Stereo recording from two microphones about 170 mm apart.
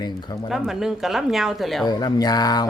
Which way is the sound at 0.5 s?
Centre (ahead or behind).